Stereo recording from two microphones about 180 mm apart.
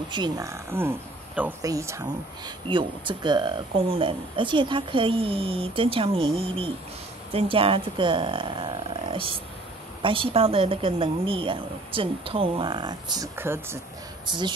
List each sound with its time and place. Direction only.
0.1 s speech: 20° right (ahead or behind)
2.7 s speech: 25° right (ahead or behind)